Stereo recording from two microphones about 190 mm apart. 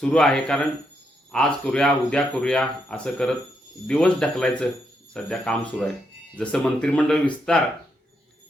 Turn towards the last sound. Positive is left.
turn(degrees=5)  # may be behind; listen again after turning